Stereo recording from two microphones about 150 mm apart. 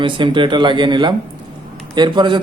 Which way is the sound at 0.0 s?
35° right (ahead or behind).